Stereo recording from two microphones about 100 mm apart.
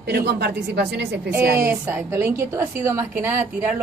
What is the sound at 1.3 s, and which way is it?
A woman's voice, 20° right (ahead or behind).